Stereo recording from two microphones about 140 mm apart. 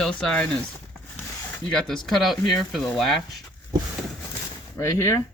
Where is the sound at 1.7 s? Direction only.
Centre (ahead or behind).